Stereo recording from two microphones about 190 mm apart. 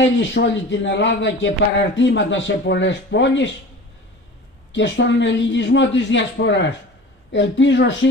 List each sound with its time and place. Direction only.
0.0 s a man's voice: 75° left (ahead or behind)
4.7 s a man's voice: 70° left (ahead or behind)